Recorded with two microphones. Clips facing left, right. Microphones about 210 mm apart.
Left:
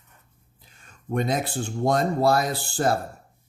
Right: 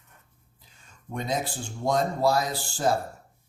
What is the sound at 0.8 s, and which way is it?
Speech, 60° left (ahead or behind).